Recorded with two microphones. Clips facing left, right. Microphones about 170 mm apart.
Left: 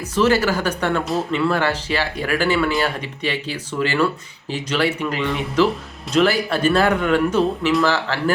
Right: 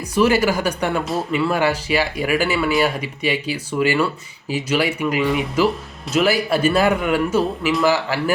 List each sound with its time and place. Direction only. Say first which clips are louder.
0.1 s speech: right 1 dB; 10° right (ahead or behind)